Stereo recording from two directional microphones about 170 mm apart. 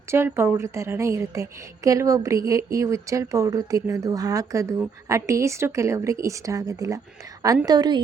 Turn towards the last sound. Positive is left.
turn(degrees=-25)  # may be behind; listen again after turning